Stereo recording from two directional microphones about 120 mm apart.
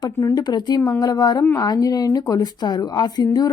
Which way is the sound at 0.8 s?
25° left (ahead or behind).